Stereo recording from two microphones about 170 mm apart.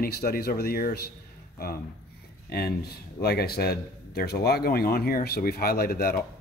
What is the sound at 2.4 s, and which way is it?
Speech, 65° left (ahead or behind).